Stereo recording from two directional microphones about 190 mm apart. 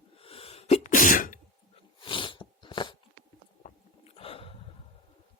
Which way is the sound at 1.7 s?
25° left (ahead or behind).